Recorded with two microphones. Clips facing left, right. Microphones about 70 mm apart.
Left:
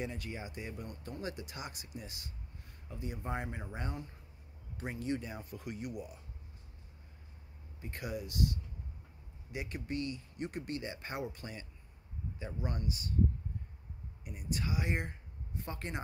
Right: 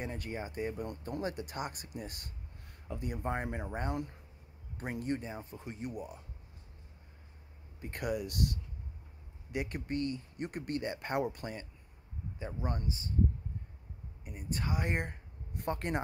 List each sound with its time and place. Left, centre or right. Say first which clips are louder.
0.0 s speech: right 2 dB; right
3.2 s speech: right 3 dB; right
4.7 s speech: right 1 dB; right
5.2 s speech: right 1 dB; right
7.8 s speech: right 5 dB; right
12.4 s speech: right 2 dB; right
14.2 s speech: right 1 dB; right